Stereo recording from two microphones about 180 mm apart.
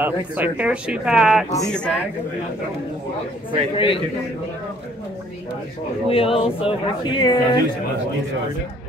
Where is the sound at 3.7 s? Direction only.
30° left (ahead or behind).